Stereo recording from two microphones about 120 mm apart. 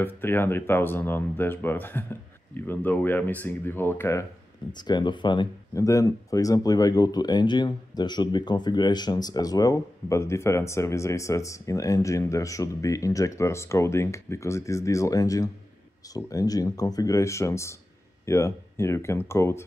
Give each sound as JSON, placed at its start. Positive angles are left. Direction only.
{"t": 0.0, "sound": "speech", "side_deg": 15}
{"t": 4.7, "sound": "speech", "side_deg": 40}
{"t": 5.8, "sound": "speech", "side_deg": 25}